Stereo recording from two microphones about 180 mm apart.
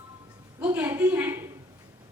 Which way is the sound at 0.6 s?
10° right (ahead or behind).